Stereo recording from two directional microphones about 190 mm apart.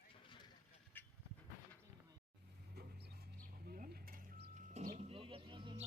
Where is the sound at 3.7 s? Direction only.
45° right (ahead or behind).